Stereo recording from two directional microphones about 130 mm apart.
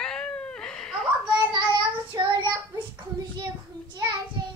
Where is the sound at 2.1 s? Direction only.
25° right (ahead or behind).